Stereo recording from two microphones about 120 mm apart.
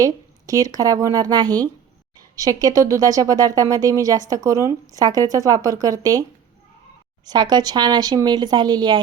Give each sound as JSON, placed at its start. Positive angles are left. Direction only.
{"t": 0.0, "sound": "a woman's voice", "side_deg": -30}
{"t": 7.3, "sound": "a woman's voice", "side_deg": -35}